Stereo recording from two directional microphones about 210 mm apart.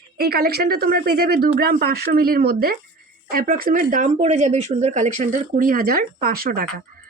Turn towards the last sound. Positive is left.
turn(degrees=-45)  # may be behind; listen again after turning